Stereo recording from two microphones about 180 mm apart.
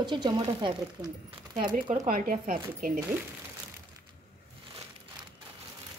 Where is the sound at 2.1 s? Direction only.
50° right (ahead or behind).